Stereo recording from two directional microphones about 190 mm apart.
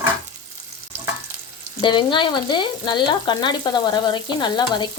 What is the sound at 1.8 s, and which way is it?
Frying, 25° left (ahead or behind).